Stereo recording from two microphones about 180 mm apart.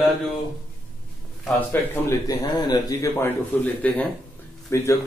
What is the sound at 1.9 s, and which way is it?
Speech, 20° left (ahead or behind).